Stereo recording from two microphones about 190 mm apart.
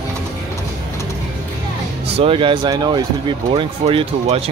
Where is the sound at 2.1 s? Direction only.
30° right (ahead or behind).